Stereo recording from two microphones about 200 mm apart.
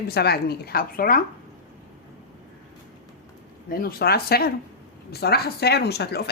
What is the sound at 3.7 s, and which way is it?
A woman's voice, 50° left (ahead or behind).